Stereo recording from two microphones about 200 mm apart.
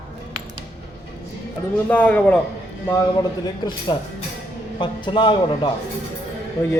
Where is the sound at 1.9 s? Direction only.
5° left (ahead or behind).